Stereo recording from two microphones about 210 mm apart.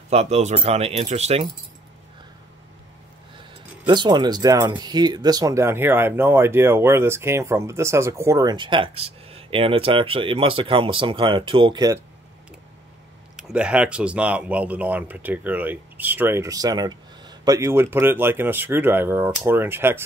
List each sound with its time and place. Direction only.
0.1 s speech: 30° right (ahead or behind)
3.8 s speech: 20° right (ahead or behind)
13.4 s speech: 5° right (ahead or behind)